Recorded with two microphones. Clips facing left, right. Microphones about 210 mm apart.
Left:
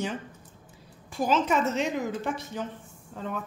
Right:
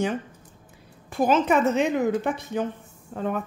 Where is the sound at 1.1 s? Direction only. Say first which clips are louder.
Right 5 dB; 55° right (ahead or behind).